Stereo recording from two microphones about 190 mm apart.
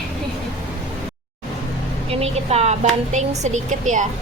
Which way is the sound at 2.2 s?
35° right (ahead or behind).